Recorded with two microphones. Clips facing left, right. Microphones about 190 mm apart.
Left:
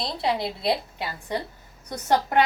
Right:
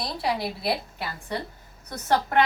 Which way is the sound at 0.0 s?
25° left (ahead or behind).